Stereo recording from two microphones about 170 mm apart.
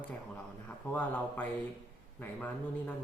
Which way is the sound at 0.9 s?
10° left (ahead or behind).